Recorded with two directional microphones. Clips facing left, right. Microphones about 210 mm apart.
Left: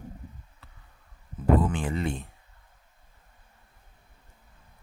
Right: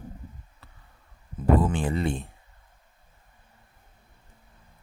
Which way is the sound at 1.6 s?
30° right (ahead or behind).